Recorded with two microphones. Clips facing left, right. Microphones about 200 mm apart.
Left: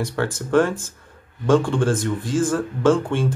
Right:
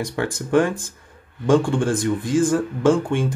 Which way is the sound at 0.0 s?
15° right (ahead or behind).